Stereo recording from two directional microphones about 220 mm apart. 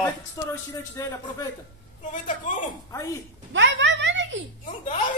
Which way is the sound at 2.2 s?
35° left (ahead or behind).